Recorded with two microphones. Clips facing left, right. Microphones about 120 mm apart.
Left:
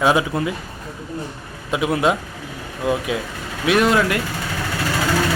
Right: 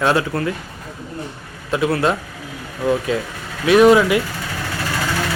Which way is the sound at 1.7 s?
15° left (ahead or behind).